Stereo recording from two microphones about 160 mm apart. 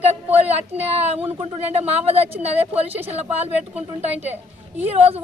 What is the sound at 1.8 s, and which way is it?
A woman's voice, 40° right (ahead or behind).